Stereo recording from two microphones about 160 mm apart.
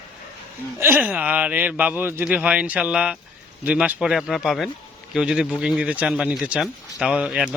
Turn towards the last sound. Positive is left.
turn(degrees=-5)  # may be behind; listen again after turning